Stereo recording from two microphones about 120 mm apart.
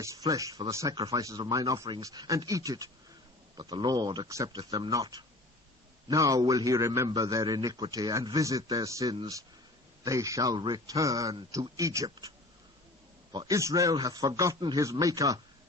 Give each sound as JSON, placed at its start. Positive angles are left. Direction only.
{"t": 0.0, "sound": "a man's voice", "side_deg": -25}
{"t": 6.1, "sound": "a man's voice", "side_deg": -30}
{"t": 13.5, "sound": "a man's voice", "side_deg": -25}